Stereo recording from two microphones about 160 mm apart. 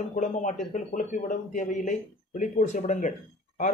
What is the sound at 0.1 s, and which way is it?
Speech, 50° left (ahead or behind).